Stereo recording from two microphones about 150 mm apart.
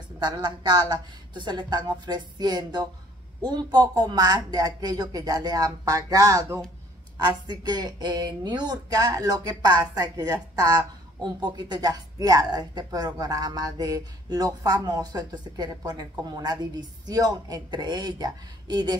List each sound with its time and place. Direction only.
0.2 s speech: 30° right (ahead or behind)